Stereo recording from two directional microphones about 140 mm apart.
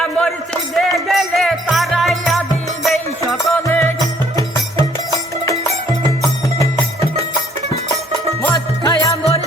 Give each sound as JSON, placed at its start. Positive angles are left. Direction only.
{"t": 0.0, "sound": "music", "side_deg": 5}
{"t": 3.6, "sound": "music", "side_deg": 15}
{"t": 8.4, "sound": "music", "side_deg": 15}
{"t": 8.8, "sound": "music", "side_deg": 30}